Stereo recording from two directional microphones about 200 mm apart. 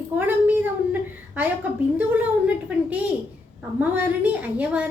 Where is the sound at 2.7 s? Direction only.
5° right (ahead or behind).